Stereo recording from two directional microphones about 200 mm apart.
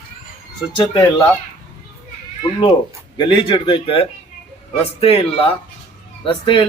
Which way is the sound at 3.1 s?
25° left (ahead or behind).